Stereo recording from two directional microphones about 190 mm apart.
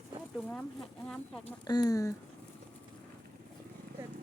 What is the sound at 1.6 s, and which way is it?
Speech, 20° left (ahead or behind).